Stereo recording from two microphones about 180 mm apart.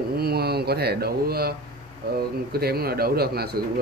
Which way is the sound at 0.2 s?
60° right (ahead or behind).